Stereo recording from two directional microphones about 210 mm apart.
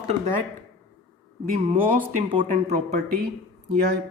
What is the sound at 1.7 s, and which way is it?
Speech, 40° right (ahead or behind).